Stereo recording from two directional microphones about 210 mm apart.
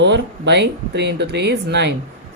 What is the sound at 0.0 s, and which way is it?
Speech, 55° right (ahead or behind).